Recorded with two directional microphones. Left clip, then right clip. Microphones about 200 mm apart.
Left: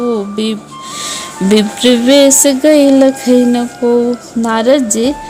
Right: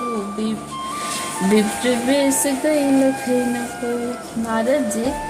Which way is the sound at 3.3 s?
40° left (ahead or behind).